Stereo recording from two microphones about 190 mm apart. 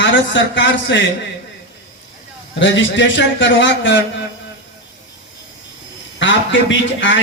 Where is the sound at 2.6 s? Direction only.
75° left (ahead or behind).